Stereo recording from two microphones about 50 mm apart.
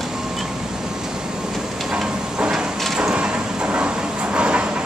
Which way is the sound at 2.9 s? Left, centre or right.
Centre.